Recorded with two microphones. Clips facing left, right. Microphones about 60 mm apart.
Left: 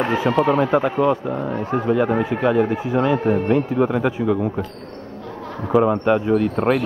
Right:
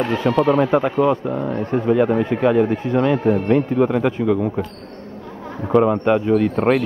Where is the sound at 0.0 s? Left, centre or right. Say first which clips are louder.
Right 1 dB; centre.